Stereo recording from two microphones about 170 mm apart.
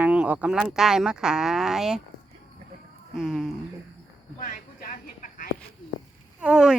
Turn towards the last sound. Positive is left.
turn(degrees=-5)  # may be behind; listen again after turning